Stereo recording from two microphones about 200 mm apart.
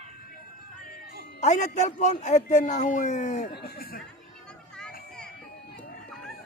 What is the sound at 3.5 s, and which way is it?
Speech, 50° left (ahead or behind).